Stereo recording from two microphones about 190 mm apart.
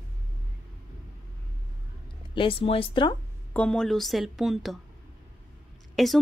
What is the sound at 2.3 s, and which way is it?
Speech, 30° left (ahead or behind).